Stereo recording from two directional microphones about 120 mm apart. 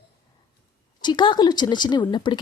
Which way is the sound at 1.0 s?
40° left (ahead or behind).